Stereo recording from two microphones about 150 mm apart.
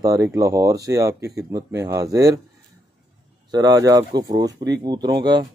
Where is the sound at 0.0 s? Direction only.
20° right (ahead or behind).